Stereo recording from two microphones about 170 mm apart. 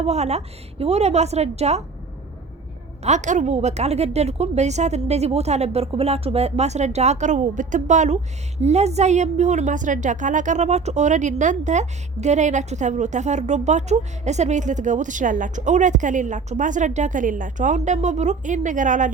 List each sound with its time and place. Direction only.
0.0 s a woman's voice: 40° right (ahead or behind)
3.0 s a woman's voice: 45° right (ahead or behind)